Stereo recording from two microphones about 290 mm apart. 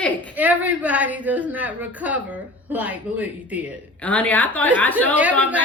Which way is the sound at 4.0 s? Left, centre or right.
Centre.